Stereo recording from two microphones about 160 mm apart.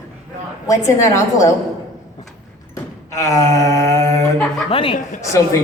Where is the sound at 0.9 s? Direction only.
20° left (ahead or behind).